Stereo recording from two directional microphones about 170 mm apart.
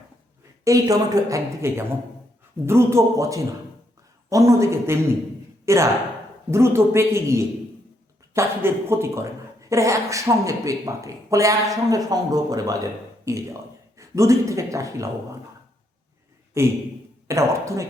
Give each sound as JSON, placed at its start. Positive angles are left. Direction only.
{"t": 0.6, "sound": "a woman's voice", "side_deg": -20}
{"t": 16.6, "sound": "speech", "side_deg": -15}